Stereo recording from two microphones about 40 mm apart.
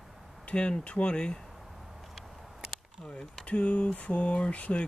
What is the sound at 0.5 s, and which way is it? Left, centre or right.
Speech, left.